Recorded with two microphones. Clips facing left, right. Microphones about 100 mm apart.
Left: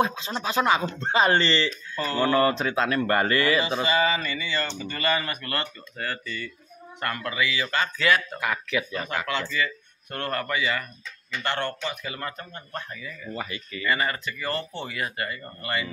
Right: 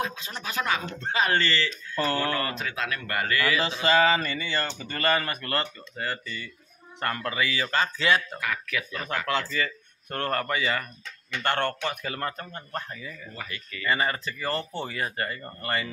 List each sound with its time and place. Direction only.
0.0 s speech: 25° left (ahead or behind)
3.5 s mantra: 80° right
4.2 s speech: 45° right (ahead or behind); by 6.5 s 20° right (ahead or behind)
7.0 s speech: 35° right (ahead or behind)
8.4 s speech: 25° left (ahead or behind)
9.5 s speech: 40° right (ahead or behind)
11.4 s speech: 50° right (ahead or behind); by 13.3 s 35° right (ahead or behind)
13.3 s speech: 25° left (ahead or behind)
13.8 s speech: 30° right (ahead or behind)